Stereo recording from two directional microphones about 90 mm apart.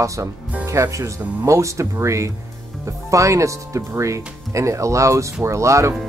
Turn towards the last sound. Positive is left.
turn(degrees=-35)  # may be behind; listen again after turning